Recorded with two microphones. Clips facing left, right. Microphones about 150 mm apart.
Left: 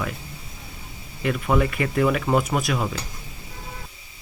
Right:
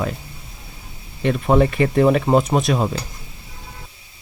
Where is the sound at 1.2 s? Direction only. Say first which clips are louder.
Right 5 dB; 35° right (ahead or behind).